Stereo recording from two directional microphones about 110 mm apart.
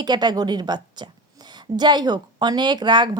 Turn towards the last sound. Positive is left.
turn(degrees=-45)  # may be behind; listen again after turning